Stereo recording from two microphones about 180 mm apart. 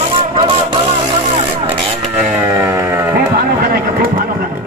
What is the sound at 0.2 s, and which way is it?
Vehicle, 30° right (ahead or behind).